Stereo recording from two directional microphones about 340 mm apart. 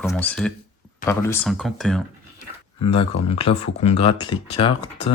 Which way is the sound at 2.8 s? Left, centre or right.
Centre.